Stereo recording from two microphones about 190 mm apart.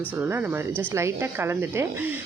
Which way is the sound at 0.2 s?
10° right (ahead or behind).